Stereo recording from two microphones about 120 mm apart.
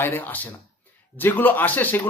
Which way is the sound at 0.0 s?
15° left (ahead or behind).